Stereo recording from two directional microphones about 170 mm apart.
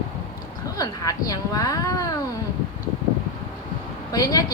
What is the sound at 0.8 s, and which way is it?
Speech, 20° left (ahead or behind).